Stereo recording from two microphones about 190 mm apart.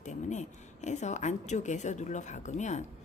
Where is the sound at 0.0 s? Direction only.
40° left (ahead or behind).